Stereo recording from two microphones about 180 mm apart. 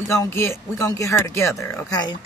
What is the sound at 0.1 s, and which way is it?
Speech, 15° left (ahead or behind).